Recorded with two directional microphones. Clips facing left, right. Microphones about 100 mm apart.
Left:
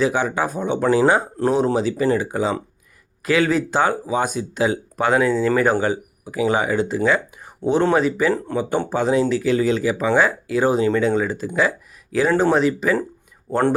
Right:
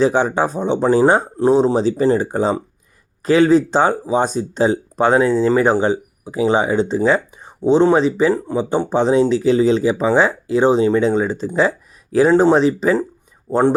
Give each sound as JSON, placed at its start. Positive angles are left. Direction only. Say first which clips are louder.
{"t": 0.0, "sound": "speech", "louder": "right 4 dB", "side_deg": -30}
{"t": 1.7, "sound": "speech", "louder": "right 4 dB", "side_deg": -30}
{"t": 7.6, "sound": "speech", "louder": "right 4 dB", "side_deg": -20}
{"t": 13.5, "sound": "speech", "louder": "right 4 dB", "side_deg": -20}